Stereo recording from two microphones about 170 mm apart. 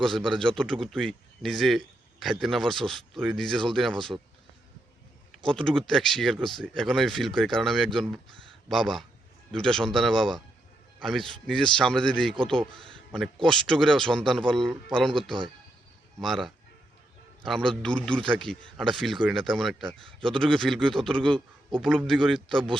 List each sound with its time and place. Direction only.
0.3 s speech: 5° left (ahead or behind)
5.5 s speech: 5° left (ahead or behind)
13.4 s speech: 5° left (ahead or behind)
16.2 s speech: centre (ahead or behind)